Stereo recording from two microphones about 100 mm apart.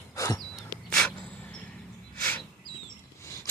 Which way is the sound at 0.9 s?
10° left (ahead or behind).